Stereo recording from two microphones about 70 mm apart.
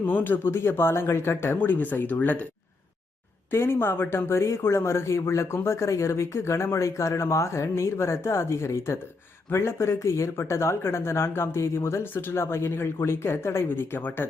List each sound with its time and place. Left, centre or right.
0.0 s speech: left
3.5 s speech: left